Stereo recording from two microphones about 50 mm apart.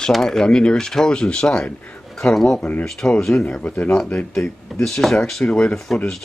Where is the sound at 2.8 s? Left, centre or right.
Centre.